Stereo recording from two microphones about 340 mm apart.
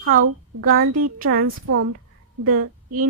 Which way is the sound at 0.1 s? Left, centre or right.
Right.